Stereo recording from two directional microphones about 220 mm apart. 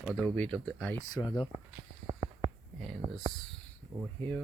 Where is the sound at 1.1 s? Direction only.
15° left (ahead or behind).